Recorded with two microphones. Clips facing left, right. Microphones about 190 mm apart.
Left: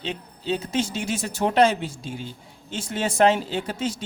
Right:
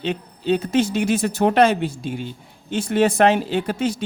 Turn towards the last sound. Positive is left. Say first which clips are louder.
# right 5 dB
turn(degrees=-60)  # may be behind; listen again after turning